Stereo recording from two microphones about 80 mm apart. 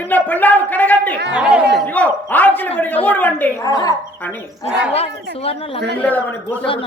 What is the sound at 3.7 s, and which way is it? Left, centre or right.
Music, left.